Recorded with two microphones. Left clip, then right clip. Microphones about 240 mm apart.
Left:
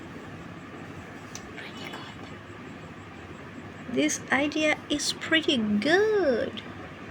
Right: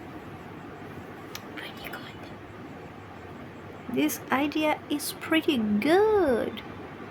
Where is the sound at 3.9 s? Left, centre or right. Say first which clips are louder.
Left 1 dB; centre.